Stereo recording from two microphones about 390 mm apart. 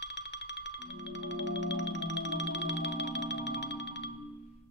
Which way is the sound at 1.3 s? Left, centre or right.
Left.